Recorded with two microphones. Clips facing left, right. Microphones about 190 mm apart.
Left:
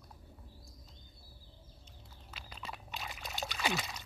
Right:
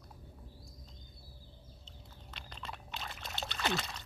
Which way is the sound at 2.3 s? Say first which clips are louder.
Even; 5° left (ahead or behind).